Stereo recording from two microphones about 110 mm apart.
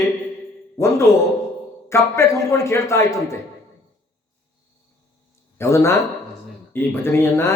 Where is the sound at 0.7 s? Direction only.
25° left (ahead or behind).